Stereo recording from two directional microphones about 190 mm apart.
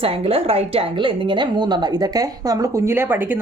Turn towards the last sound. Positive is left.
turn(degrees=-10)  # may be behind; listen again after turning